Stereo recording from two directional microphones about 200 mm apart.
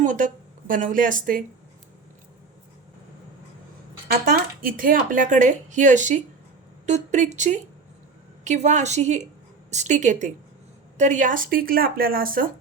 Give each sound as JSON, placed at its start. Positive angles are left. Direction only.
{"t": 0.0, "sound": "speech", "side_deg": -40}
{"t": 4.3, "sound": "speech", "side_deg": -45}